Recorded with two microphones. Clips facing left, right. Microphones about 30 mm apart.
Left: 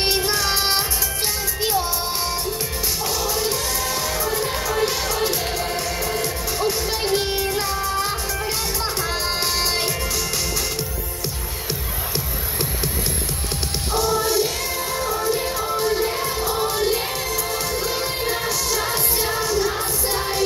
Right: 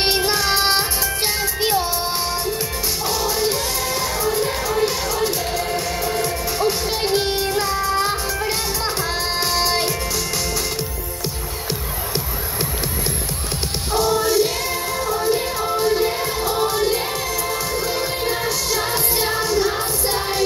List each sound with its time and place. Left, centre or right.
0.0 s music: right
1.6 s music: right
3.2 s music: centre
3.9 s music: centre
6.9 s music: right
9.6 s music: centre
13.9 s music: centre
18.7 s music: centre